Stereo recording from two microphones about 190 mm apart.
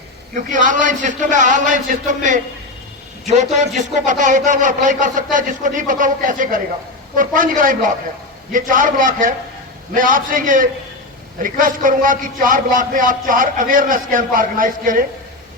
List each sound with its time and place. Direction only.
0.3 s a man's voice: 40° right (ahead or behind)